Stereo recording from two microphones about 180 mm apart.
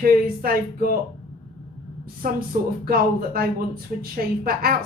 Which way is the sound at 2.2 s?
50° right (ahead or behind).